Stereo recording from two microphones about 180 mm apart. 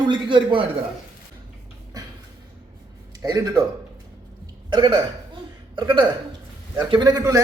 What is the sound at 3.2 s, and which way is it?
Speech, 20° right (ahead or behind).